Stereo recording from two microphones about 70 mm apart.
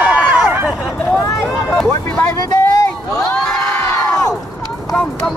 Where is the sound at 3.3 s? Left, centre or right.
Centre.